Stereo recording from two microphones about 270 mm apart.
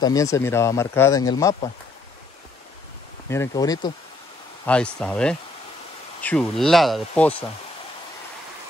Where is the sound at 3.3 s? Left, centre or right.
Centre.